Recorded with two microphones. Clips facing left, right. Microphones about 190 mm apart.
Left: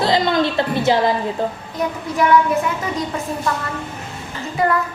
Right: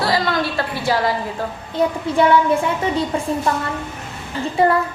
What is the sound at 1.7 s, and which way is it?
A woman's voice, 30° right (ahead or behind).